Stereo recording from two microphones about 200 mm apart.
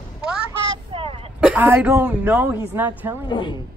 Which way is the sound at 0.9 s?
25° right (ahead or behind).